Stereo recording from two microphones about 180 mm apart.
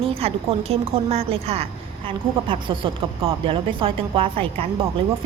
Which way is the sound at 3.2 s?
30° right (ahead or behind).